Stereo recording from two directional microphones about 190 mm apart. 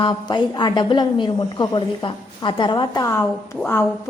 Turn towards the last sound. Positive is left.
turn(degrees=10)  # may be behind; listen again after turning